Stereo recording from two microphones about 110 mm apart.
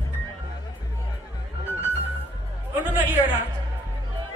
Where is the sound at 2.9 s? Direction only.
15° right (ahead or behind).